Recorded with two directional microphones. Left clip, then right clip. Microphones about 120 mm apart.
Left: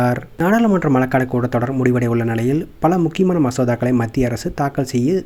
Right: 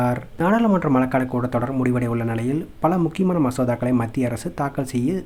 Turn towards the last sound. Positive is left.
turn(degrees=25)  # may be behind; listen again after turning